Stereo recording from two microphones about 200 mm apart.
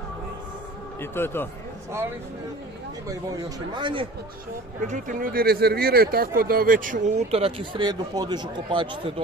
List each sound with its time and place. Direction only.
1.1 s speech: 10° left (ahead or behind)
1.9 s speech: 10° right (ahead or behind)
3.7 s speech: 25° right (ahead or behind)
4.8 s speech: 40° right (ahead or behind)